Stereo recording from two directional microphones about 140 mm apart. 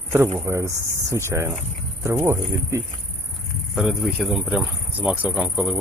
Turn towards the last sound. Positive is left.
turn(degrees=-10)  # may be behind; listen again after turning